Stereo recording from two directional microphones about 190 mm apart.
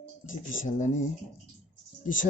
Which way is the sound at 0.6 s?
40° left (ahead or behind).